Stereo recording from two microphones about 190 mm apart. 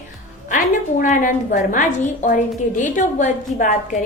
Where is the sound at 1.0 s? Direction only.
45° left (ahead or behind).